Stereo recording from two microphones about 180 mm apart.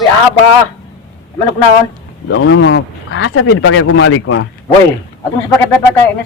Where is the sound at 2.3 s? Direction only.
90° left.